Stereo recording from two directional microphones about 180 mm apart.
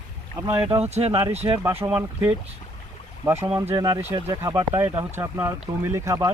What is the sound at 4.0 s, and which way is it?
Speech, 35° right (ahead or behind).